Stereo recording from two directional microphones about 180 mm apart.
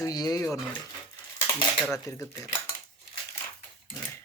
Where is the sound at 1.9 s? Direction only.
15° left (ahead or behind).